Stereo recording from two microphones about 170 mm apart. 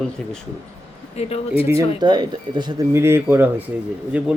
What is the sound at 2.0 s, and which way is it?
A man's voice, 25° right (ahead or behind).